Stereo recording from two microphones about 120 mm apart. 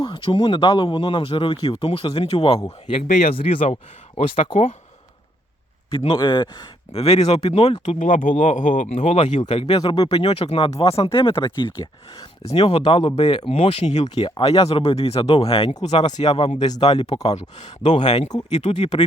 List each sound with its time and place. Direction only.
0.0 s speech: 45° left (ahead or behind)
6.1 s speech: 40° left (ahead or behind)
7.9 s speech: 90° left; by 9.6 s 65° left (ahead or behind)
9.6 s speech: 35° left (ahead or behind)
10.2 s speech: 55° left (ahead or behind)
12.5 s speech: 55° left (ahead or behind)
13.5 s speech: 55° left (ahead or behind)
14.3 s speech: 50° left (ahead or behind)
17.8 s speech: 70° left (ahead or behind)